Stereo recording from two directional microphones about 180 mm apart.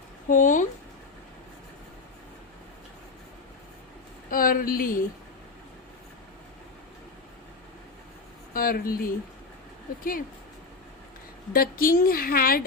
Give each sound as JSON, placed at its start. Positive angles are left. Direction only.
{"t": 0.3, "sound": "speech", "side_deg": 45}
{"t": 4.3, "sound": "speech", "side_deg": 50}
{"t": 8.5, "sound": "a woman's voice", "side_deg": 50}
{"t": 11.5, "sound": "a woman's voice", "side_deg": 55}